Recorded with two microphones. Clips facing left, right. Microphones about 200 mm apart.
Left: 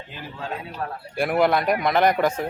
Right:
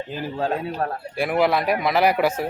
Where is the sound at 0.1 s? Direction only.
40° right (ahead or behind).